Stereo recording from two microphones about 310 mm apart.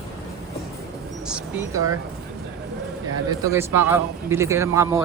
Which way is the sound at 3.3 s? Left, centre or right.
Centre.